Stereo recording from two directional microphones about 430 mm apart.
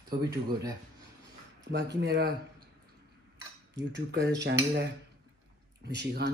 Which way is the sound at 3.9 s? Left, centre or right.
Right.